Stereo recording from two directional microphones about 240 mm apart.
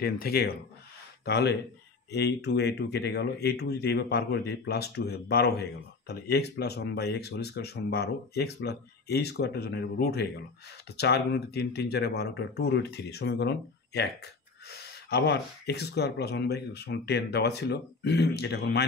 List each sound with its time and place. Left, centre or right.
0.0 s speech: left